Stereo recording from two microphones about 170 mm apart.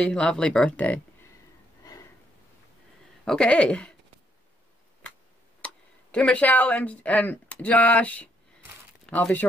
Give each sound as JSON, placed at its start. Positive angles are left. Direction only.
{"t": 0.0, "sound": "speech", "side_deg": 5}
{"t": 3.3, "sound": "speech", "side_deg": 5}
{"t": 6.1, "sound": "speech", "side_deg": 10}